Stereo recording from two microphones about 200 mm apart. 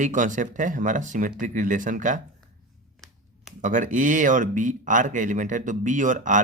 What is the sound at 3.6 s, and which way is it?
Speech, 40° right (ahead or behind).